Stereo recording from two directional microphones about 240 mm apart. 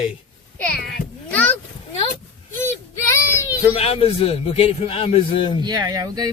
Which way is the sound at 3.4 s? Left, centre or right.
Left.